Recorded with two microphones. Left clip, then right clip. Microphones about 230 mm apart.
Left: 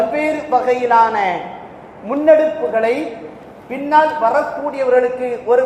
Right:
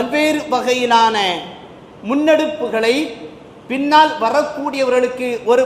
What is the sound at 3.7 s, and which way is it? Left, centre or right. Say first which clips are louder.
A man's voice: right 1 dB; right.